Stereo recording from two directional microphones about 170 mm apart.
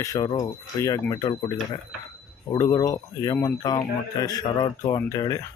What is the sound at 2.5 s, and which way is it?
Speech, 20° left (ahead or behind).